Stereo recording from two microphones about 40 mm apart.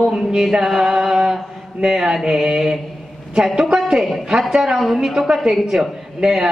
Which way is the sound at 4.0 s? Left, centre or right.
Centre.